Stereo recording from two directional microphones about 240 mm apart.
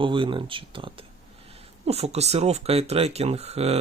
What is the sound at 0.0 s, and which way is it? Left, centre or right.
Speech, right.